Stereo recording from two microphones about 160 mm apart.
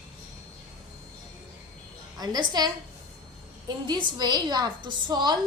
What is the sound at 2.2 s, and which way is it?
Speech, 25° right (ahead or behind).